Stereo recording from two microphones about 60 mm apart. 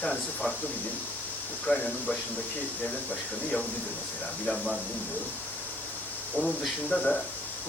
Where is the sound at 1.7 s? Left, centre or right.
Left.